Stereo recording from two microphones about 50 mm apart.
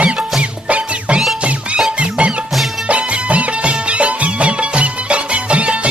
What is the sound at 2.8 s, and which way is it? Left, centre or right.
Music, right.